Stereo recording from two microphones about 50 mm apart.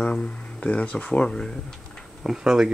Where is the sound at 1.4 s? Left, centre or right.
Centre.